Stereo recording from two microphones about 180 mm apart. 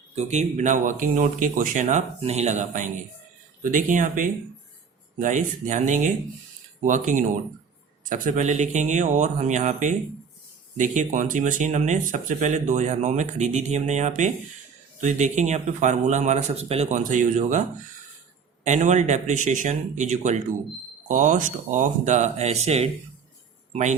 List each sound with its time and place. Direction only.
0.2 s speech: 40° right (ahead or behind)
18.6 s speech: 40° right (ahead or behind)